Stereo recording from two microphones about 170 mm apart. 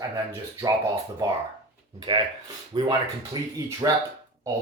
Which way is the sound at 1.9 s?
30° right (ahead or behind).